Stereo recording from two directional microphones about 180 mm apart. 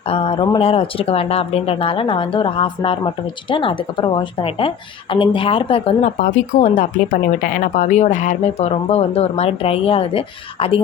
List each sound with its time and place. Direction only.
0.1 s speech: 30° left (ahead or behind)
6.1 s speech: 45° left (ahead or behind)